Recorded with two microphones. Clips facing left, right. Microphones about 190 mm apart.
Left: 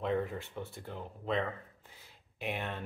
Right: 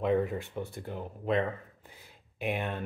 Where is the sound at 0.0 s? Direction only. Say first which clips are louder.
Right 5 dB; 5° right (ahead or behind).